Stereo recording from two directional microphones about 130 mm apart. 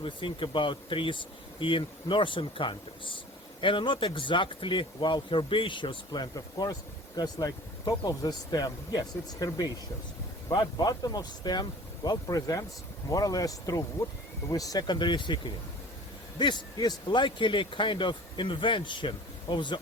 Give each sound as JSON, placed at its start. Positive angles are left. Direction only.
{"t": 0.0, "sound": "speech", "side_deg": 40}